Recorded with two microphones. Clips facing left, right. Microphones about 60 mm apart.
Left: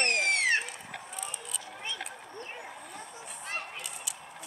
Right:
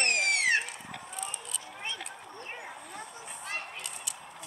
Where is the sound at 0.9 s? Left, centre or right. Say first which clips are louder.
Right 1 dB; centre.